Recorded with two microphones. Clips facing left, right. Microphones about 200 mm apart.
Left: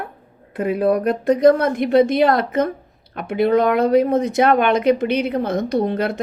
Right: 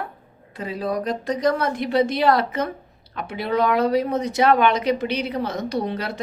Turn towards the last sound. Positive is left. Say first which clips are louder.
# left 6 dB
turn(degrees=50)  # may be behind; listen again after turning